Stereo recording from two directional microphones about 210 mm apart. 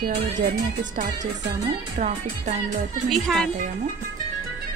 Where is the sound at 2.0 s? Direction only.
35° right (ahead or behind).